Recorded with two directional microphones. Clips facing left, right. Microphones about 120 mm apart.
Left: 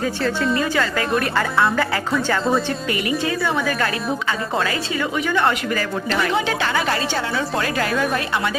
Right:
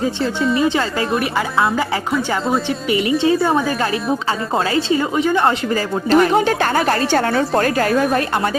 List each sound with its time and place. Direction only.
0.5 s a woman's voice: 20° right (ahead or behind)
1.2 s speech: 15° right (ahead or behind)
2.6 s a woman's voice: 25° right (ahead or behind)
6.1 s a woman's voice: 45° right (ahead or behind)